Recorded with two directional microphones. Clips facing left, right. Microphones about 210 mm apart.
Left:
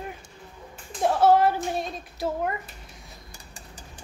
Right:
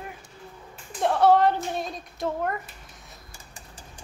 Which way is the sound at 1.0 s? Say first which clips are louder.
Even; 5° left (ahead or behind).